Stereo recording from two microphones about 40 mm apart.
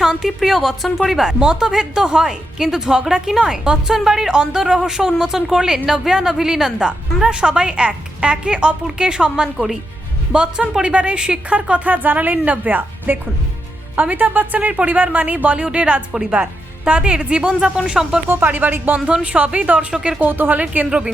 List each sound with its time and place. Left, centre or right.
0.0 s a woman's voice: centre
1.1 s a woman's voice: centre
10.3 s a woman's voice: right
11.4 s a woman's voice: right
17.7 s speech: centre
18.3 s speech: right
18.9 s a woman's voice: right
19.2 s a woman's voice: right
19.9 s a woman's voice: centre
20.1 s speech: right